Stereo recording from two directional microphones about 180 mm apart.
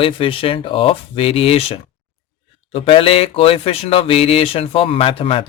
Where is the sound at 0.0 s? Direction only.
30° left (ahead or behind).